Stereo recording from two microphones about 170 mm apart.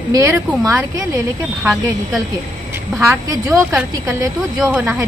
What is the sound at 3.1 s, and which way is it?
Speech, 15° right (ahead or behind).